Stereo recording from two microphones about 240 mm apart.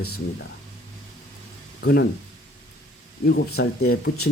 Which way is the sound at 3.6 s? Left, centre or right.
Left.